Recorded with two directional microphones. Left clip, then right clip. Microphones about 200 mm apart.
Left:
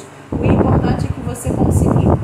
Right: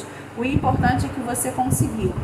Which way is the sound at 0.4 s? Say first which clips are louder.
Left 5 dB; 25° right (ahead or behind).